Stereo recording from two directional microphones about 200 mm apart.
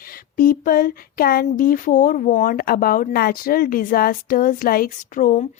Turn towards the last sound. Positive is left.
turn(degrees=40)  # may be behind; listen again after turning